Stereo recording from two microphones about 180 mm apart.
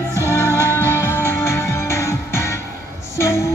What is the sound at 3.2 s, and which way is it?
Music, 15° left (ahead or behind).